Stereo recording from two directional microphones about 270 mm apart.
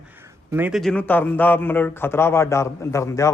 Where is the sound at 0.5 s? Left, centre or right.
Centre.